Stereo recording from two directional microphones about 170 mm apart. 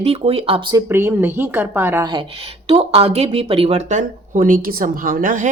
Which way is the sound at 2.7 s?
35° right (ahead or behind).